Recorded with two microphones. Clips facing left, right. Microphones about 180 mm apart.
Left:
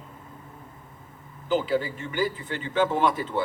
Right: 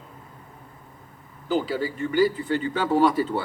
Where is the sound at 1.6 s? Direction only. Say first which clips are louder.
Even; 40° right (ahead or behind).